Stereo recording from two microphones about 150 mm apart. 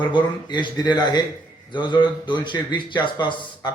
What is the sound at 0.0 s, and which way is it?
A man's voice, 30° left (ahead or behind).